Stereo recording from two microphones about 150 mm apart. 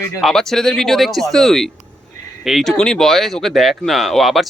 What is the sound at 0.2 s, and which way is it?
Speech, centre (ahead or behind).